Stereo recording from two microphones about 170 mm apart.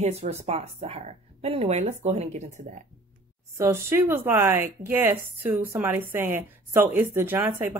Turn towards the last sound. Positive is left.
turn(degrees=-15)  # may be behind; listen again after turning